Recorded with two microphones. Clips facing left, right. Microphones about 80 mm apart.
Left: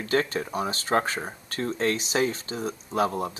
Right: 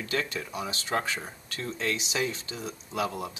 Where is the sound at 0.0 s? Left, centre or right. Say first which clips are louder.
Left 6 dB; left.